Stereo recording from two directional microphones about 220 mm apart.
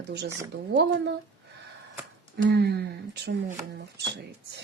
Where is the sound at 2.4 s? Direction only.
50° right (ahead or behind).